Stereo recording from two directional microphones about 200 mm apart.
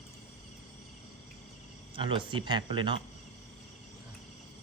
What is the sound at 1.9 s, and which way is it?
Speech, 25° right (ahead or behind).